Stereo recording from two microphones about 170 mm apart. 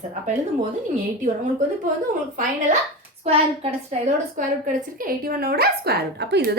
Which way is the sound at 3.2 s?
35° right (ahead or behind).